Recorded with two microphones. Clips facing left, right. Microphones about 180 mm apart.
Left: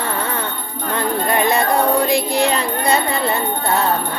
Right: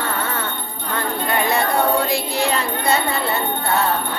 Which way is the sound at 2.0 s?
15° left (ahead or behind).